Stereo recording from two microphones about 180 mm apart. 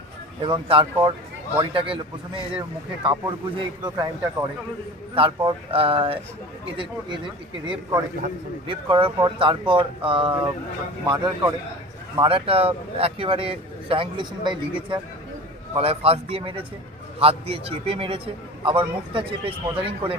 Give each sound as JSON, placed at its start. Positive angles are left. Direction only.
{"t": 0.4, "sound": "speech", "side_deg": -30}
{"t": 3.0, "sound": "speech", "side_deg": -30}
{"t": 5.5, "sound": "a man's voice", "side_deg": -30}
{"t": 7.6, "sound": "a man's voice", "side_deg": -25}